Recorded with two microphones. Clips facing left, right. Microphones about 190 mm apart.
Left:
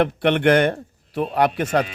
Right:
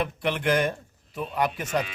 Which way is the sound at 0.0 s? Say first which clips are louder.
Left 9 dB; 70° left (ahead or behind).